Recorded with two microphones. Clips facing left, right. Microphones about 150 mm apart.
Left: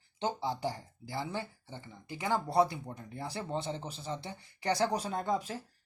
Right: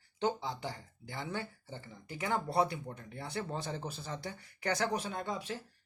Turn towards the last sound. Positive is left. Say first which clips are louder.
# left 5 dB
turn(degrees=40)  # may be behind; listen again after turning